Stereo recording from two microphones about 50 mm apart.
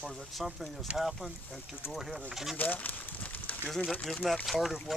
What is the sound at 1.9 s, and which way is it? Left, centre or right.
Speech, centre.